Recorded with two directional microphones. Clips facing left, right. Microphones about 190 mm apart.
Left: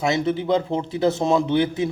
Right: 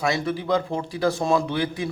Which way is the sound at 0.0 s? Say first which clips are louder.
Left 3 dB; 25° left (ahead or behind).